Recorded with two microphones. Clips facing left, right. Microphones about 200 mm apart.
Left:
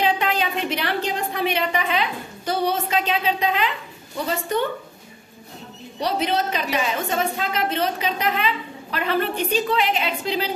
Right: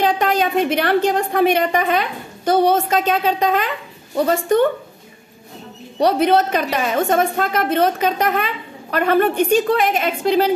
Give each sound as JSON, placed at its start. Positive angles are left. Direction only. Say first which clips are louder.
{"t": 0.0, "sound": "a woman's voice", "louder": "right 5 dB", "side_deg": -45}
{"t": 5.9, "sound": "a woman's voice", "louder": "right 8 dB", "side_deg": -55}